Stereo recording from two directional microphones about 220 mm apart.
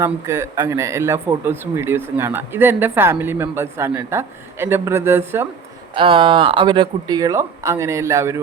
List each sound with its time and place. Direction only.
0.0 s a man's voice: 10° right (ahead or behind)
5.9 s a man's voice: 25° right (ahead or behind)